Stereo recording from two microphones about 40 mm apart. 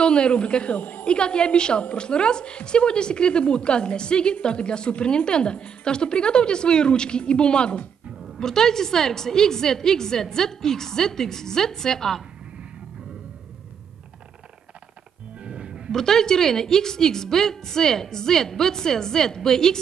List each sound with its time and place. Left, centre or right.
0.0 s speech: left
0.7 s speech: left
1.0 s a woman's voice: left
8.4 s a woman's voice: centre
15.4 s music: right
15.9 s a woman's voice: centre